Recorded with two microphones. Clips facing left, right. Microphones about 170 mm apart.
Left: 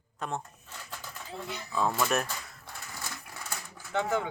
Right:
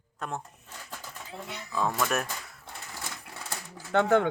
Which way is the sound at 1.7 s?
Centre (ahead or behind).